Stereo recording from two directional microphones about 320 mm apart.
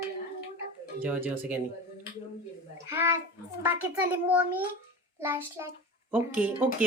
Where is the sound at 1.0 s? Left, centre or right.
Centre.